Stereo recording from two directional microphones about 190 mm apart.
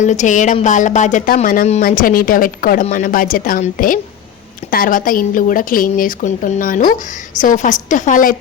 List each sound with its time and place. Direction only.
0.0 s a woman's voice: 40° left (ahead or behind)